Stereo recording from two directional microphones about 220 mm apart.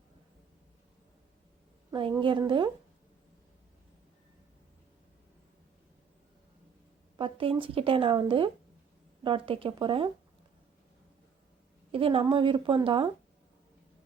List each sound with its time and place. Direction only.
1.9 s speech: 20° right (ahead or behind)
7.2 s speech: 25° right (ahead or behind)
11.9 s speech: 25° right (ahead or behind)